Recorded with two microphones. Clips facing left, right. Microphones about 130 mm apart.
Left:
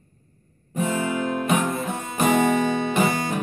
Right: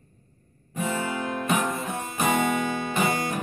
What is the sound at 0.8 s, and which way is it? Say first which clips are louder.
Music: left 4 dB; 15° left (ahead or behind).